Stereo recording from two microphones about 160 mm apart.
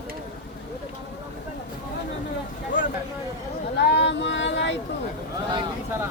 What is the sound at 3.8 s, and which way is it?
Female singing, 90° left.